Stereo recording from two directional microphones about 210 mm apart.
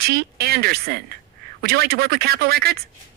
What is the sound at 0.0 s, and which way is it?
Speech, 50° right (ahead or behind).